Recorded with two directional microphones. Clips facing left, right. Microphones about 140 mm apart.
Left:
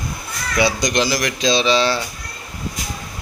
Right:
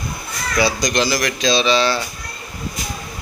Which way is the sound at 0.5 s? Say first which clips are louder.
Even; 20° left (ahead or behind).